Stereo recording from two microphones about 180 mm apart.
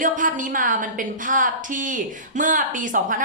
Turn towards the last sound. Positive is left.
turn(degrees=-45)  # may be behind; listen again after turning